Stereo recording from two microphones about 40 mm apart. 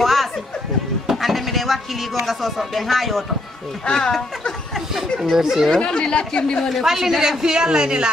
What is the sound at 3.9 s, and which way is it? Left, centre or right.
Speech, centre.